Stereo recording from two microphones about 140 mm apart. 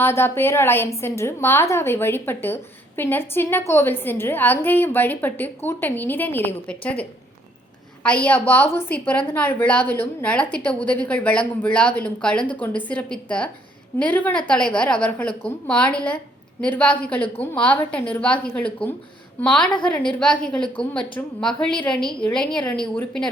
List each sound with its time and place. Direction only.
0.0 s a woman's voice: 20° left (ahead or behind)